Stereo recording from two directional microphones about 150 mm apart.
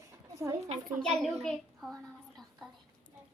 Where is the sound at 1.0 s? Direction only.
Centre (ahead or behind).